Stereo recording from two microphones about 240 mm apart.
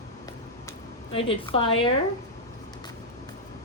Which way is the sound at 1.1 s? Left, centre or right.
Left.